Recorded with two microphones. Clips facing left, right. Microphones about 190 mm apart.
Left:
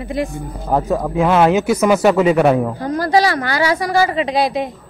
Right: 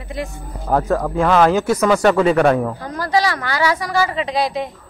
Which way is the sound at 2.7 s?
35° left (ahead or behind).